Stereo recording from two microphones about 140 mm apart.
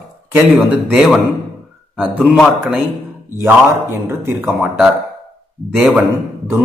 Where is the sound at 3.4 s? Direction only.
15° right (ahead or behind).